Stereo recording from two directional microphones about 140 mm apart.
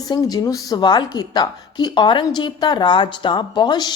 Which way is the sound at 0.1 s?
30° left (ahead or behind).